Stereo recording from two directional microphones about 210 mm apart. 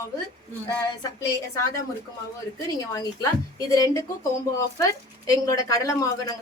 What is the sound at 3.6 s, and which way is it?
Speech, 15° left (ahead or behind).